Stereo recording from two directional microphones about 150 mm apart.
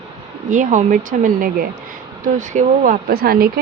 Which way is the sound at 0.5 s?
55° right (ahead or behind).